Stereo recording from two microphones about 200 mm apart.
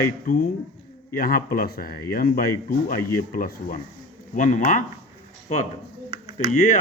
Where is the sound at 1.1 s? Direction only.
45° left (ahead or behind).